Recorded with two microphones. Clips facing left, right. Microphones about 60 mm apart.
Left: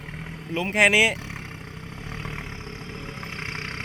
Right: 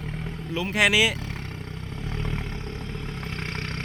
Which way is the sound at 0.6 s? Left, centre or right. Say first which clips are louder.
Left 2 dB; left.